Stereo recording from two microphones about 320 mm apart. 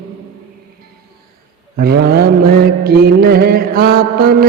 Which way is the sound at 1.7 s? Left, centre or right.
Right.